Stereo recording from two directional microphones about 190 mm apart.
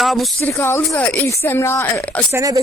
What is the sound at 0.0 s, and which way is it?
Speech, centre (ahead or behind).